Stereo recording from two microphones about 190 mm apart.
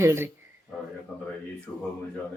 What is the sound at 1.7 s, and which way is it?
Speech, 5° left (ahead or behind).